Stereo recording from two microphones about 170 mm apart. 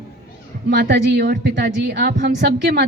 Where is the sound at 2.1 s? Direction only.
90° right.